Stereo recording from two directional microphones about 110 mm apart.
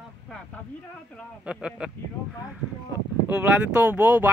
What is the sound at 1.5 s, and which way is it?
Speech, 10° right (ahead or behind).